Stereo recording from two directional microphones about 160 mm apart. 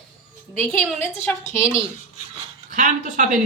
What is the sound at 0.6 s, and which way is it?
A woman's voice, 5° left (ahead or behind).